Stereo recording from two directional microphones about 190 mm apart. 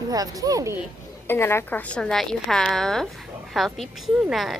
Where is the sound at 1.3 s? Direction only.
10° left (ahead or behind).